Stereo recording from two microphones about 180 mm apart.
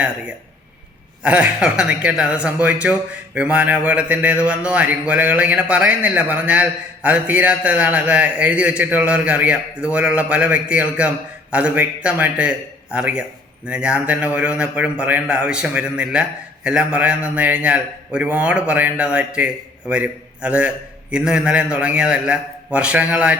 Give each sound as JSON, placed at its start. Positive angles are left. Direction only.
{"t": 1.2, "sound": "speech", "side_deg": -5}